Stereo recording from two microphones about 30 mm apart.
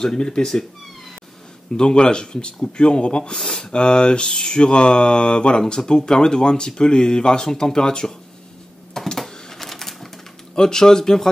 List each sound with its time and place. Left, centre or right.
0.0 s speech: left
1.8 s speech: left
3.3 s speech: centre
3.7 s speech: left
8.9 s a sound: centre
9.5 s typewriter: centre
10.5 s speech: centre